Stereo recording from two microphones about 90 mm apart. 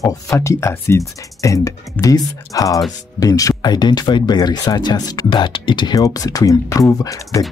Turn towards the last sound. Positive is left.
turn(degrees=40)  # may be behind; listen again after turning